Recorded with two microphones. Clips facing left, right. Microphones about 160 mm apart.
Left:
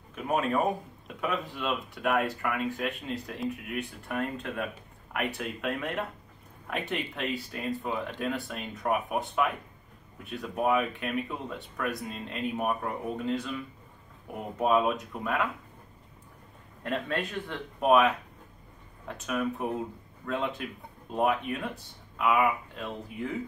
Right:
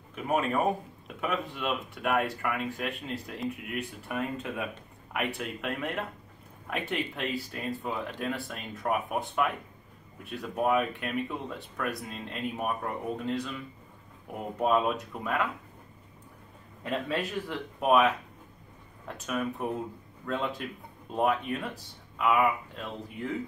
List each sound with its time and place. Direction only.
0.1 s a sound: centre (ahead or behind)
1.0 s speech: centre (ahead or behind)
14.6 s speech: centre (ahead or behind)
16.8 s speech: centre (ahead or behind)